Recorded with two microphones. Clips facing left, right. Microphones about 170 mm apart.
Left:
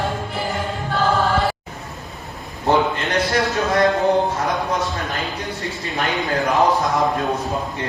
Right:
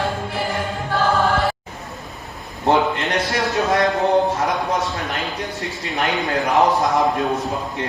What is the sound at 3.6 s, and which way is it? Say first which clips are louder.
Speech: even; centre (ahead or behind).